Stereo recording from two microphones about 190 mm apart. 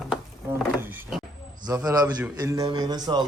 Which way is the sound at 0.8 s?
10° right (ahead or behind).